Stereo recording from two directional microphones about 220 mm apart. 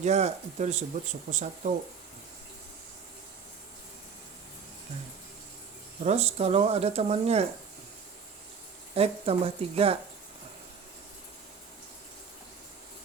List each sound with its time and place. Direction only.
0.0 s speech: 30° right (ahead or behind)
6.0 s speech: 30° right (ahead or behind)
9.0 s speech: 25° right (ahead or behind)